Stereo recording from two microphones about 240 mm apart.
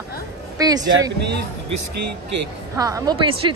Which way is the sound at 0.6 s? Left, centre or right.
Centre.